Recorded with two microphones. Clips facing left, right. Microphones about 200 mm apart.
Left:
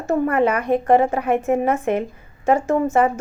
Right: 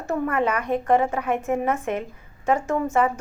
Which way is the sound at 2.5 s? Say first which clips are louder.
Left 5 dB; 30° left (ahead or behind).